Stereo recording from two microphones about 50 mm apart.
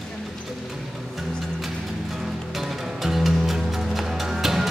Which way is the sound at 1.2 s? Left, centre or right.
Centre.